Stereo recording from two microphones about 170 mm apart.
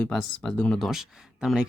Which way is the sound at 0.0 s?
5° left (ahead or behind).